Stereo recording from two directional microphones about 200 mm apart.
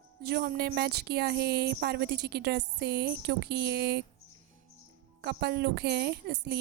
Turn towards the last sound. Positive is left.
turn(degrees=-55)  # may be behind; listen again after turning